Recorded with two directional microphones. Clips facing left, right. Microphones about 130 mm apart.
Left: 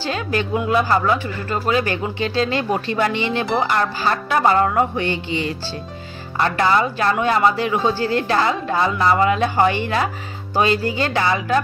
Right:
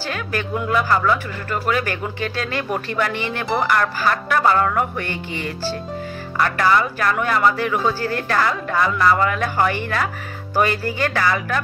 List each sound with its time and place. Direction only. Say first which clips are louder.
0.0 s speech: left 3 dB; 25° left (ahead or behind)
6.3 s speech: even; 25° left (ahead or behind)